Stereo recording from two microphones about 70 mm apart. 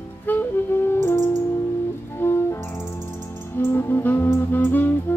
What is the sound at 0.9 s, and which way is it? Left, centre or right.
Music, left.